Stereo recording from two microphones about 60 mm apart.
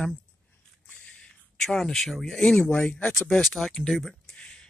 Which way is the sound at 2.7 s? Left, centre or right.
Left.